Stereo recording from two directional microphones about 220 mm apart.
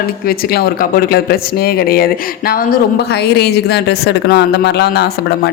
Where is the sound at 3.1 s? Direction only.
50° left (ahead or behind).